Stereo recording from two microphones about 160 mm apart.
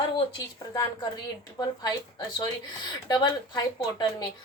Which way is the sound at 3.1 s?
25° left (ahead or behind).